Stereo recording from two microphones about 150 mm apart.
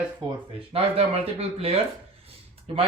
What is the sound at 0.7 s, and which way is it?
Speech, 40° right (ahead or behind).